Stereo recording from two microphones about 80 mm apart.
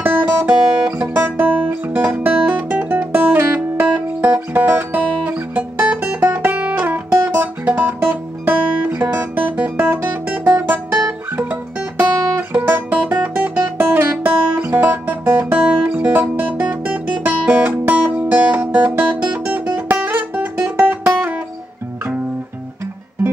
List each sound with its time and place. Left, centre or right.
0.0 s music: right
12.0 s guitar: right